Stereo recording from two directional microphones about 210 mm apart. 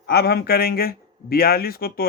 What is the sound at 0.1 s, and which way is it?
Speech, 50° left (ahead or behind).